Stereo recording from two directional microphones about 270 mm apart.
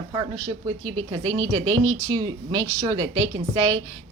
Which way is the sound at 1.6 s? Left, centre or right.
Right.